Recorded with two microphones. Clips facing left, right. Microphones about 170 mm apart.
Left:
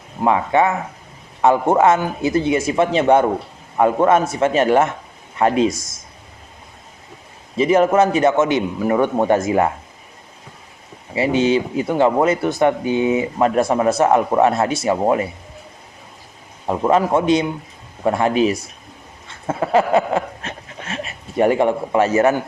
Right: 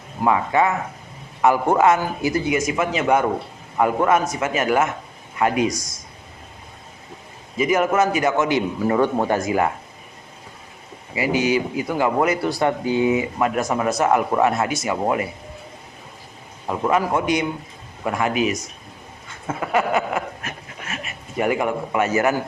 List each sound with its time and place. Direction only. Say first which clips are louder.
0.3 s a man's voice: left 2 dB; 25° left (ahead or behind)
7.5 s speech: left 5 dB; 30° left (ahead or behind)
11.1 s speech: left 4 dB; 25° left (ahead or behind)
16.6 s speech: left 4 dB; 25° left (ahead or behind)
19.5 s a sound: left 5 dB; 30° left (ahead or behind)